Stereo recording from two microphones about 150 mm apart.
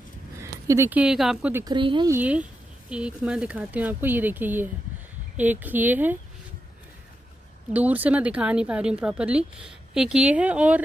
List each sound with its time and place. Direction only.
0.4 s speech: 20° right (ahead or behind); by 1.5 s centre (ahead or behind)
1.7 s speech: 30° right (ahead or behind)
2.0 s speech: 10° right (ahead or behind)
7.7 s speech: 10° right (ahead or behind)